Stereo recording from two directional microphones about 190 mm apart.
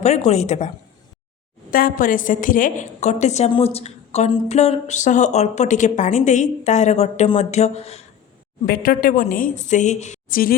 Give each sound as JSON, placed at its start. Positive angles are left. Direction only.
{"t": 0.0, "sound": "a woman's voice", "side_deg": 35}
{"t": 1.7, "sound": "a woman's voice", "side_deg": 45}
{"t": 8.6, "sound": "a woman's voice", "side_deg": 50}